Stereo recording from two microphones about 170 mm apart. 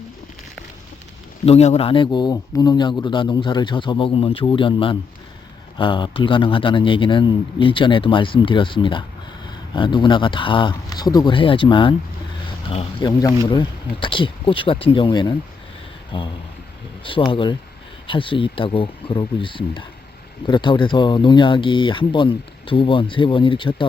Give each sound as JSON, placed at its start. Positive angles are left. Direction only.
{"t": 1.5, "sound": "a man's voice", "side_deg": 40}